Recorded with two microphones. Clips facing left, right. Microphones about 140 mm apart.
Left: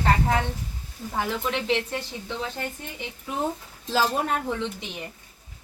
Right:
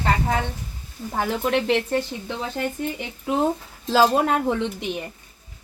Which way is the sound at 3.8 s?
90° right.